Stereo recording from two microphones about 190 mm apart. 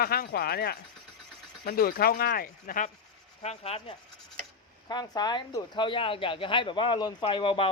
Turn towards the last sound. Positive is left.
turn(degrees=30)  # may be behind; listen again after turning